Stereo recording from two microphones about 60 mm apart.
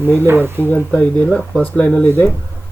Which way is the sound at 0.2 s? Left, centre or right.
Right.